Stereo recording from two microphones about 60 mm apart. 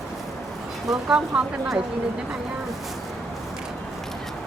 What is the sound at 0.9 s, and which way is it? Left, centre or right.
Speech, centre.